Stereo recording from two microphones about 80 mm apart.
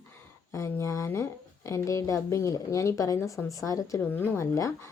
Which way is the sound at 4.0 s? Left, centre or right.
Left.